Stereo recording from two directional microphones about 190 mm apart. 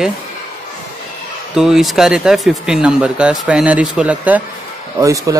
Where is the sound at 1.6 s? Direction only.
Centre (ahead or behind).